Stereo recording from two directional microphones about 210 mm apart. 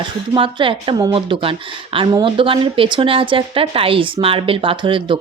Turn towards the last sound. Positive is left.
turn(degrees=-25)  # may be behind; listen again after turning